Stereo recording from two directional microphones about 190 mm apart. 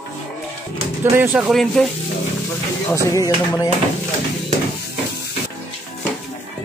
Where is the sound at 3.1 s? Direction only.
20° left (ahead or behind).